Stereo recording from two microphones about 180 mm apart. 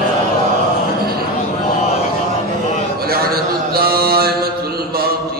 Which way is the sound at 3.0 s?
55° right (ahead or behind).